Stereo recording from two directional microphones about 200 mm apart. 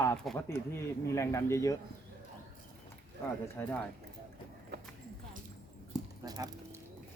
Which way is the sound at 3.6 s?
10° left (ahead or behind).